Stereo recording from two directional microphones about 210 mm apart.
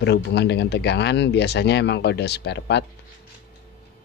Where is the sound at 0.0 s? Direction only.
50° left (ahead or behind).